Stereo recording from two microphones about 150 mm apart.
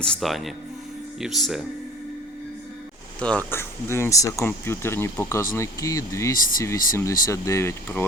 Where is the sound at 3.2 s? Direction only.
10° left (ahead or behind).